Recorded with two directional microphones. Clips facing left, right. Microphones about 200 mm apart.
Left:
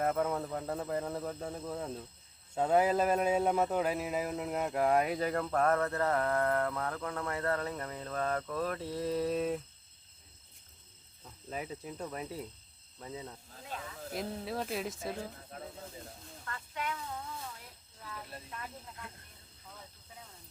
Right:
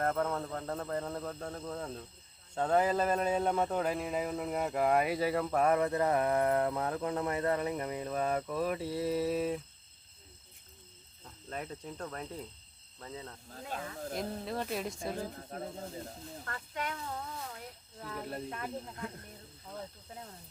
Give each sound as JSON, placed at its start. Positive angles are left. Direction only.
{"t": 0.0, "sound": "speech", "side_deg": 5}
{"t": 11.4, "sound": "speech", "side_deg": 5}
{"t": 13.7, "sound": "speech", "side_deg": -45}
{"t": 14.1, "sound": "speech", "side_deg": 0}
{"t": 15.5, "sound": "speech", "side_deg": -40}
{"t": 18.0, "sound": "speech", "side_deg": -50}